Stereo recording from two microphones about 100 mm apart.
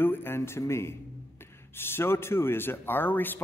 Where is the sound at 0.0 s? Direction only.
20° left (ahead or behind).